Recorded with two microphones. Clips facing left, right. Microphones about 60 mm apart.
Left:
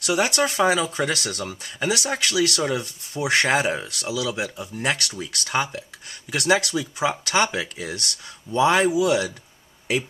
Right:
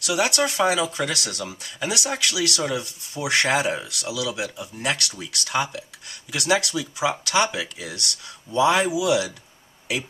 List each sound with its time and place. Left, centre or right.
0.0 s speech: left